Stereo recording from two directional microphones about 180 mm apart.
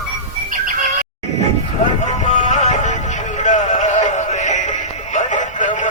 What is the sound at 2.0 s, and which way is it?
Music, 40° left (ahead or behind).